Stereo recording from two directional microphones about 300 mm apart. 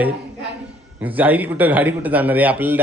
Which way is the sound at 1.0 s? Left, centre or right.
Centre.